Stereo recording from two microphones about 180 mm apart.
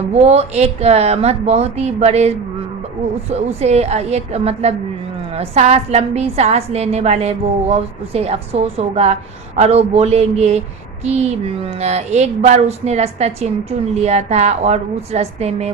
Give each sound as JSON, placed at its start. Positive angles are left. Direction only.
{"t": 0.1, "sound": "speech", "side_deg": -35}
{"t": 3.3, "sound": "speech", "side_deg": -35}